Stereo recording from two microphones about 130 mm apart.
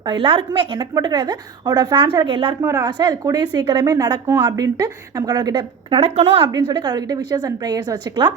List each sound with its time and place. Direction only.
0.0 s a woman's voice: 35° right (ahead or behind)
2.6 s a woman's voice: 25° right (ahead or behind)
5.9 s speech: 50° right (ahead or behind)
6.5 s a woman's voice: 35° right (ahead or behind)